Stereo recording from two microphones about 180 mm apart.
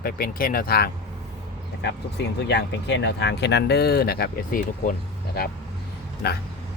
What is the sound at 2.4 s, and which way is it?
Speech, 75° left (ahead or behind).